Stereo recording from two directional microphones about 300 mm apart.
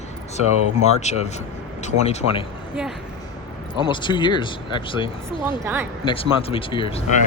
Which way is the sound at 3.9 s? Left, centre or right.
Centre.